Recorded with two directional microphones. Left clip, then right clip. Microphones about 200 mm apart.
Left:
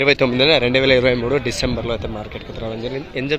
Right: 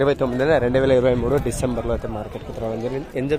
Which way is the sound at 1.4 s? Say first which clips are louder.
Left 2 dB; 15° right (ahead or behind).